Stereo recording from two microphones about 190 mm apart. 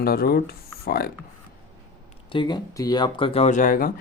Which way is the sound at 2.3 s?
25° left (ahead or behind).